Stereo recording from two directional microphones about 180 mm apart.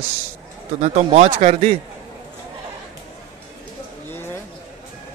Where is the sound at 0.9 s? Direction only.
35° right (ahead or behind).